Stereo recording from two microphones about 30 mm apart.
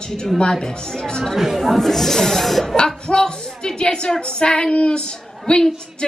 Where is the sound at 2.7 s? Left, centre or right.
Left.